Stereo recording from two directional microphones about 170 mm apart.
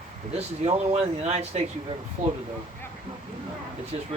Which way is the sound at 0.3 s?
40° right (ahead or behind).